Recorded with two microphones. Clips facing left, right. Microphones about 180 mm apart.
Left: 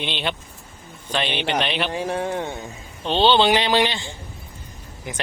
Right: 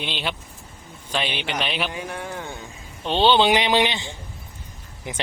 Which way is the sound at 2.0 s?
30° left (ahead or behind).